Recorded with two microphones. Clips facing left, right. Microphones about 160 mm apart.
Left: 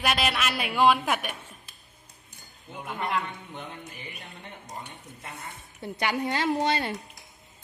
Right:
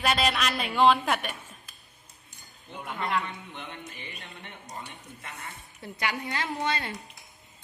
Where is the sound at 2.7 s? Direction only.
10° left (ahead or behind).